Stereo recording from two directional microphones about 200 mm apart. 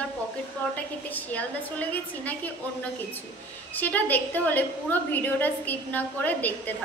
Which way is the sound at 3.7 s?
10° left (ahead or behind).